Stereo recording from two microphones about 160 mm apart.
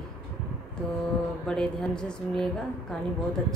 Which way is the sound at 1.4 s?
5° left (ahead or behind).